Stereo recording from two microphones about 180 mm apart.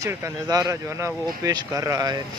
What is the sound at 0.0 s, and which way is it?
Speech, 20° right (ahead or behind).